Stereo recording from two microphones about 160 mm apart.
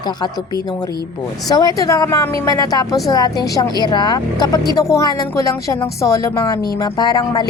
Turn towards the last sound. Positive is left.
turn(degrees=25)  # may be behind; listen again after turning